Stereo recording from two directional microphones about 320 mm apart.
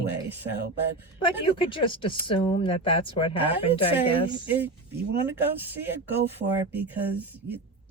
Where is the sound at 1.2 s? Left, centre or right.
Centre.